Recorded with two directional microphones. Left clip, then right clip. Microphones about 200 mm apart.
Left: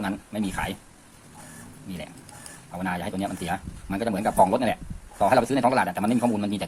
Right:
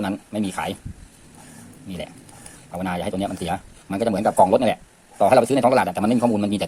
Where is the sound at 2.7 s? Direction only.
35° right (ahead or behind).